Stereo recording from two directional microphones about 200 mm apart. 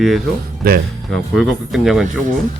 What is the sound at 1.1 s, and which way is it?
Speech, centre (ahead or behind).